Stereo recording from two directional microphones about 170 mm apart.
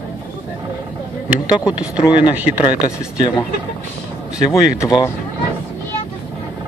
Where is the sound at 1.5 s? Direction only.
5° right (ahead or behind).